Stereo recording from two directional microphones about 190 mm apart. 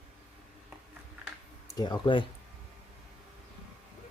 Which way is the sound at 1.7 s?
20° left (ahead or behind).